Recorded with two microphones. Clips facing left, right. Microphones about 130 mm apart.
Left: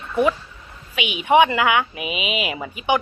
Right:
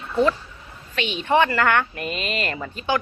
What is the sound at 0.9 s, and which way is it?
A woman's voice, 10° left (ahead or behind).